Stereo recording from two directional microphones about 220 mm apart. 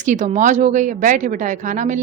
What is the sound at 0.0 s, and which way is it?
Speech, 35° right (ahead or behind).